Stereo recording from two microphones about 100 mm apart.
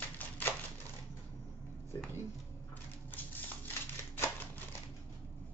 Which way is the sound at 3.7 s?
25° left (ahead or behind).